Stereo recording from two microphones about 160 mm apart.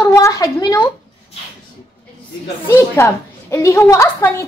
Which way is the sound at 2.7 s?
15° left (ahead or behind).